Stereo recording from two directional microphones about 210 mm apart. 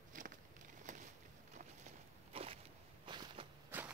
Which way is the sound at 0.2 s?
35° right (ahead or behind).